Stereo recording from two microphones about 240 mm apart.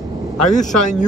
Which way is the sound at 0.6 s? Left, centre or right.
Left.